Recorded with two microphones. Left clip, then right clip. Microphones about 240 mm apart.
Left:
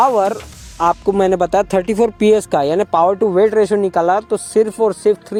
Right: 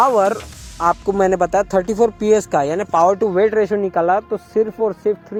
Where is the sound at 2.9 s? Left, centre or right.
Left.